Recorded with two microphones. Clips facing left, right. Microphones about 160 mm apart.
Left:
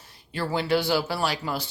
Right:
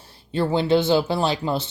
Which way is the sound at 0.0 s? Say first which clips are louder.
Right 7 dB; 30° right (ahead or behind).